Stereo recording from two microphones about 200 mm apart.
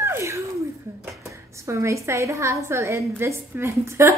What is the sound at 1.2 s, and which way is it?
A woman's voice, 15° right (ahead or behind).